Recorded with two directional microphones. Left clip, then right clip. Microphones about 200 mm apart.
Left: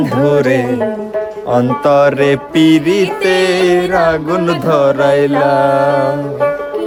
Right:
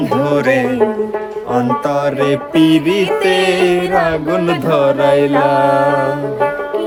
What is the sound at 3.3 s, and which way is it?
Mantra, 15° left (ahead or behind).